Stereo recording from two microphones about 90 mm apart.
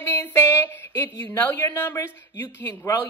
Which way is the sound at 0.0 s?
30° left (ahead or behind).